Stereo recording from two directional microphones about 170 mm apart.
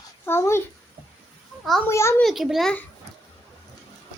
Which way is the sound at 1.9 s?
15° left (ahead or behind).